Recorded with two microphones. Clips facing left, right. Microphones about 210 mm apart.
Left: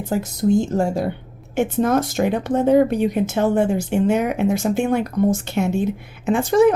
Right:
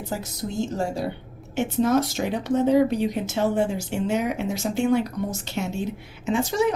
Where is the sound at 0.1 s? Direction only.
50° left (ahead or behind).